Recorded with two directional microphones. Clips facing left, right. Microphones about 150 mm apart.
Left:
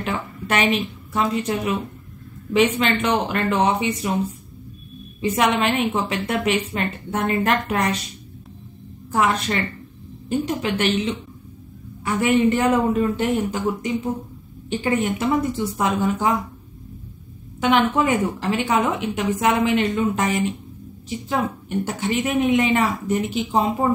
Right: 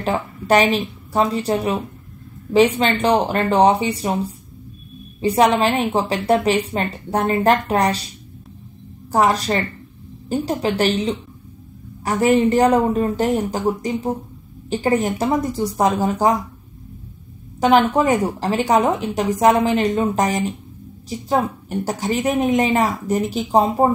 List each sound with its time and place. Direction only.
0.0 s a woman's voice: 35° right (ahead or behind)
9.1 s a woman's voice: 35° right (ahead or behind)
17.6 s a woman's voice: 40° right (ahead or behind)